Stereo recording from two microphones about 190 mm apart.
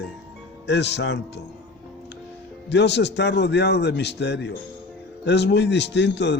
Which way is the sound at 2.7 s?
65° left (ahead or behind).